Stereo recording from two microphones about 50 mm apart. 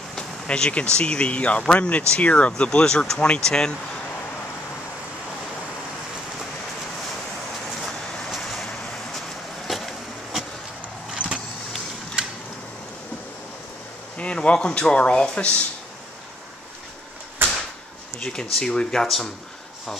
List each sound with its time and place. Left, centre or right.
0.1 s a sound: centre
0.9 s speech: centre
7.8 s vehicle: centre
9.7 s a sound: centre
11.1 s vehicle: right
14.1 s speech: left
18.2 s speech: centre